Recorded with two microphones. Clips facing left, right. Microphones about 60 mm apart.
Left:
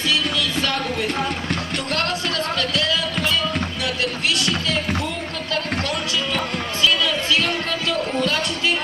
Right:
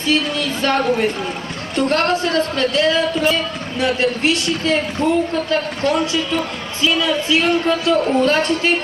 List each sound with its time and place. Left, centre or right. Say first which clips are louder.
0.1 s speech: right 5 dB; right